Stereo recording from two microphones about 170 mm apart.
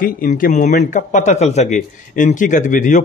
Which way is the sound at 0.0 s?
55° left (ahead or behind).